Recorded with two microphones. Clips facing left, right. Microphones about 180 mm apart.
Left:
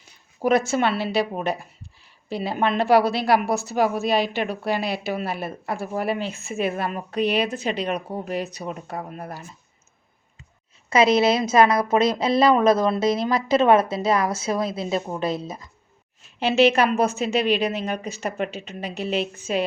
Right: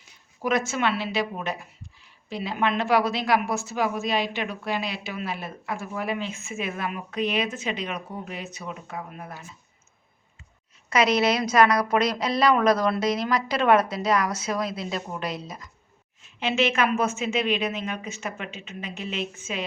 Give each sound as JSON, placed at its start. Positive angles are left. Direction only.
{"t": 0.4, "sound": "speech", "side_deg": 35}
{"t": 10.8, "sound": "a woman's voice", "side_deg": 25}